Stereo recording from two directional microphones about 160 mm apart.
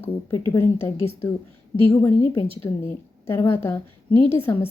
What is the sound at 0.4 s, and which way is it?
A woman's voice, 15° left (ahead or behind).